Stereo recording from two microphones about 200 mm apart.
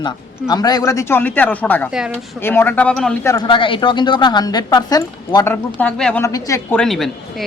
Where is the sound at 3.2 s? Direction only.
20° left (ahead or behind).